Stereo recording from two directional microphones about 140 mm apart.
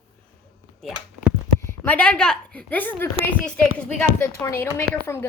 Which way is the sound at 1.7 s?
10° left (ahead or behind).